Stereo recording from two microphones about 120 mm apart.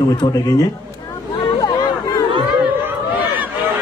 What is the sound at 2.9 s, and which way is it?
Chatter, 15° right (ahead or behind).